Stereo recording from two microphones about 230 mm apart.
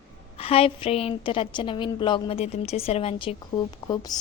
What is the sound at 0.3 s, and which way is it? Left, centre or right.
A woman's voice, left.